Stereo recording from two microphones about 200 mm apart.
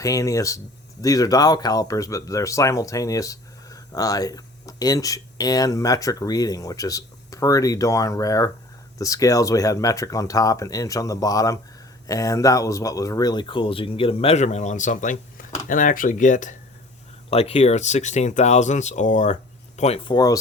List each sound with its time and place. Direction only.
0.0 s speech: 15° left (ahead or behind); by 20.1 s 30° left (ahead or behind)
20.1 s speech: 20° left (ahead or behind)